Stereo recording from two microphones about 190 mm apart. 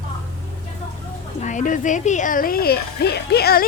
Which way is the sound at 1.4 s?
40° left (ahead or behind).